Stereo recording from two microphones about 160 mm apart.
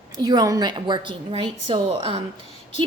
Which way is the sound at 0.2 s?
25° right (ahead or behind).